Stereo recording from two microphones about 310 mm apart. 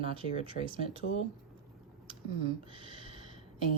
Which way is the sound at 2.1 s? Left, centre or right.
Centre.